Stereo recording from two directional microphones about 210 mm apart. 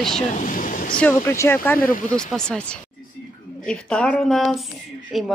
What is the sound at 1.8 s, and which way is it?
Speech, 40° left (ahead or behind).